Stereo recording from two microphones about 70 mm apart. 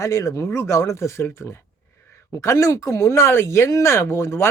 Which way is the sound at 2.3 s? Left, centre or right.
Left.